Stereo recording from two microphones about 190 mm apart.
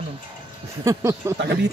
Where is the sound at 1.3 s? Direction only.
65° right (ahead or behind).